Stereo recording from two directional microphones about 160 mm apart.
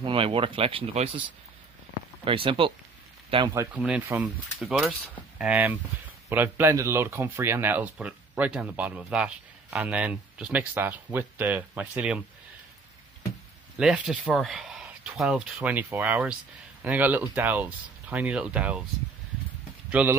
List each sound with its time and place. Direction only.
0.0 s speech: 35° right (ahead or behind)
2.2 s speech: 35° right (ahead or behind)
3.5 s speech: 10° right (ahead or behind)
13.7 s speech: 5° right (ahead or behind)
19.9 s speech: 10° right (ahead or behind)